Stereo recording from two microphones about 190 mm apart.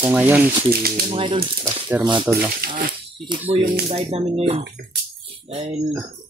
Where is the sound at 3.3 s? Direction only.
25° right (ahead or behind).